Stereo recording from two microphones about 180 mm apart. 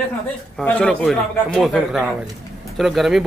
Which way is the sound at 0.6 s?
5° left (ahead or behind).